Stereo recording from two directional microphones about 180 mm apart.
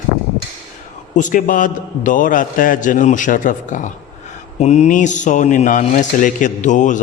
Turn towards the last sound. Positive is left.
turn(degrees=45)  # may be behind; listen again after turning